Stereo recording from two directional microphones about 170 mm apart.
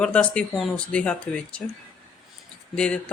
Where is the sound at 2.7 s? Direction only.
5° left (ahead or behind).